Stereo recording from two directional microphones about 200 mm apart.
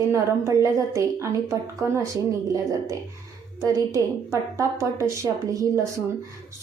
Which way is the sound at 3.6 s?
15° right (ahead or behind).